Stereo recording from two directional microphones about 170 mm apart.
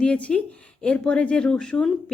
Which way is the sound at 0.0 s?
5° left (ahead or behind).